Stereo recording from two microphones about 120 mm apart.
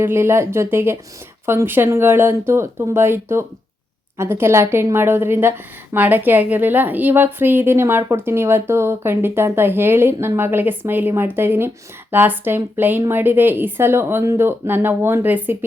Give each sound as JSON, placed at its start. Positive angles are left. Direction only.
{"t": 0.0, "sound": "a woman's voice", "side_deg": -20}